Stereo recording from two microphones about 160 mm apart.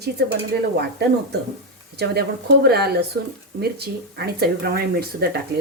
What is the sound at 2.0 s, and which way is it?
Speech, 90° right.